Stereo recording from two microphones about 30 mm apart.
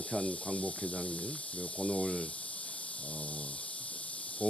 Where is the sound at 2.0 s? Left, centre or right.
Left.